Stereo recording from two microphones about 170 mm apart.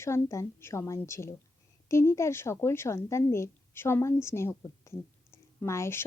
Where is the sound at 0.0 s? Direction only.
15° left (ahead or behind).